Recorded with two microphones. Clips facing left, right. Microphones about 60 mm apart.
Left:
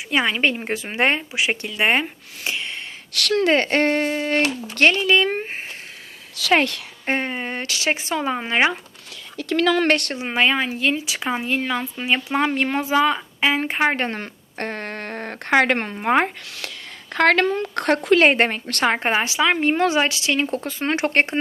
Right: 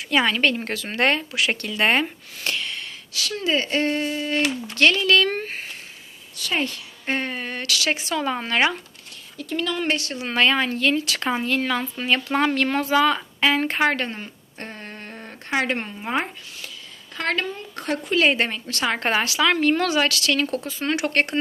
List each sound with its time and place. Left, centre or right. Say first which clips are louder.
0.1 s speech: even; centre
3.1 s speech: left 6 dB; left
4.9 s speech: left 1 dB; left
6.5 s speech: left 7 dB; left
7.0 s speech: left 2 dB; left
9.4 s speech: left 7 dB; left
10.2 s speech: even; centre
14.1 s a woman's voice: left 4 dB; left
18.2 s speech: left 4 dB; left
18.9 s speech: left 1 dB; centre
20.7 s speech: left 2 dB; left